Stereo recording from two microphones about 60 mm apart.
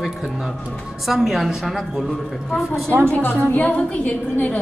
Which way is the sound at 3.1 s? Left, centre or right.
Left.